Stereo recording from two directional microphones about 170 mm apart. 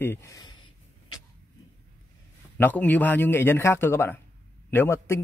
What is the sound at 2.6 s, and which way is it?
A man's voice, 10° left (ahead or behind).